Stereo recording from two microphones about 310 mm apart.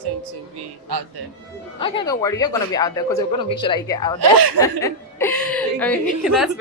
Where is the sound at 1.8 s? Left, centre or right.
Centre.